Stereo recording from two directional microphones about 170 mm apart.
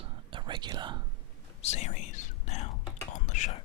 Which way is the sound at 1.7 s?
45° left (ahead or behind).